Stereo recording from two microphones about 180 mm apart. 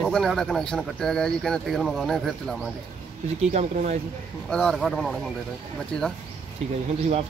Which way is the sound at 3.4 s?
40° right (ahead or behind).